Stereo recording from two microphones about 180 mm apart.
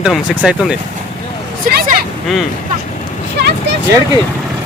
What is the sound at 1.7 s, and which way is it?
Vehicle, 55° right (ahead or behind).